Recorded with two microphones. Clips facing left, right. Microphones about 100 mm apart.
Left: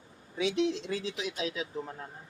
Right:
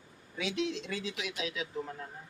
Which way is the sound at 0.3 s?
30° left (ahead or behind).